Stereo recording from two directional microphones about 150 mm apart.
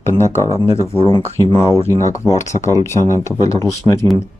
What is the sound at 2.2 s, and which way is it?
Speech, 20° left (ahead or behind).